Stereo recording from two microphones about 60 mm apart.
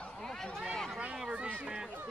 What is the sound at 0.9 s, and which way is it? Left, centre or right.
Speech, centre.